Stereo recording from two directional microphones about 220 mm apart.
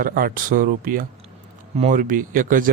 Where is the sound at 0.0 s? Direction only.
40° right (ahead or behind).